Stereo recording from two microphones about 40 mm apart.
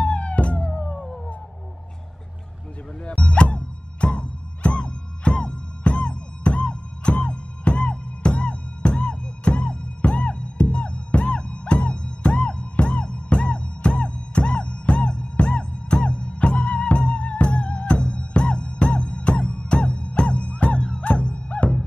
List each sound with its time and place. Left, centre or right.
0.0 s music: left
3.2 s music: left